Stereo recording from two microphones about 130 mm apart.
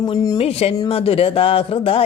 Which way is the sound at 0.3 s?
50° left (ahead or behind).